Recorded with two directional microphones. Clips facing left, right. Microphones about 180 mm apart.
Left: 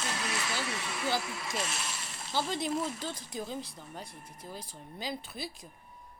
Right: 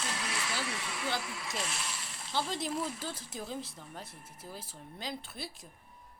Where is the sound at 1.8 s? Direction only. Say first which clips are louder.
Left 2 dB; 45° left (ahead or behind).